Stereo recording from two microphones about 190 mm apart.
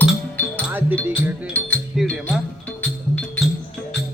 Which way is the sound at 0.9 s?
10° left (ahead or behind).